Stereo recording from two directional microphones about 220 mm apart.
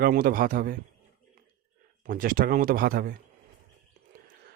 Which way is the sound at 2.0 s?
40° right (ahead or behind).